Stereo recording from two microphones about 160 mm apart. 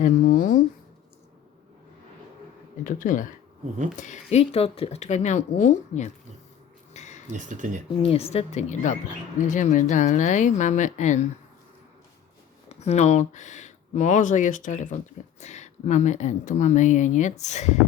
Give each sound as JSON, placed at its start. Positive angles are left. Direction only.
{"t": 0.0, "sound": "a sound", "side_deg": 55}
{"t": 2.8, "sound": "speech", "side_deg": 55}
{"t": 6.9, "sound": "a sound", "side_deg": 45}
{"t": 7.3, "sound": "speech", "side_deg": -50}
{"t": 8.0, "sound": "speech", "side_deg": 40}
{"t": 12.6, "sound": "speech", "side_deg": 45}